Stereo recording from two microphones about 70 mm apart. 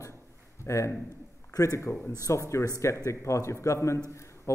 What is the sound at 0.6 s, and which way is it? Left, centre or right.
A man's voice, left.